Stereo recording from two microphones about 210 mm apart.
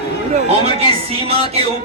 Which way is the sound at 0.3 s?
30° right (ahead or behind).